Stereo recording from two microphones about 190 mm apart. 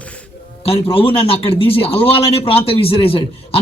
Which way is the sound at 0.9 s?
30° left (ahead or behind).